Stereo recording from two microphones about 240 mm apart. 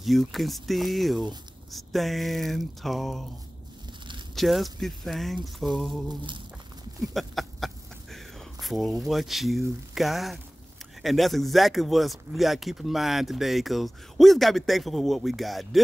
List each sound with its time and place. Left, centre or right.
0.0 s speech: centre
4.4 s speech: centre
6.0 s a sound: centre
7.0 s speech: centre